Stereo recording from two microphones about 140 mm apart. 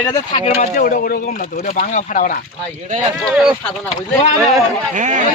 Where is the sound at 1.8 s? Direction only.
70° left (ahead or behind).